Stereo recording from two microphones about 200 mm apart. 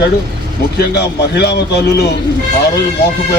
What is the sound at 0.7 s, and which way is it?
Speech, 55° left (ahead or behind).